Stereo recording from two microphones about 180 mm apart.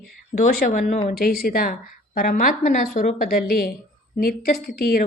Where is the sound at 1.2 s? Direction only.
55° left (ahead or behind); by 3.2 s 40° left (ahead or behind).